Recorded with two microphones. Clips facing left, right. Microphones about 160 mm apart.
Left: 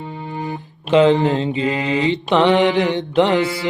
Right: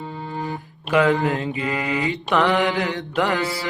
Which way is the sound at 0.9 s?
25° left (ahead or behind).